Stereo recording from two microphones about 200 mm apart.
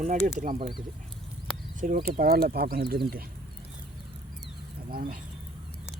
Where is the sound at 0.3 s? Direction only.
45° right (ahead or behind).